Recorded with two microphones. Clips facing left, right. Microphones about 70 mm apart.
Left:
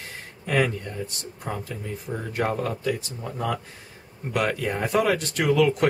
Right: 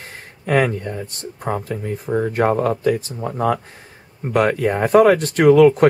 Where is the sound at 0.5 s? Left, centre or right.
Right.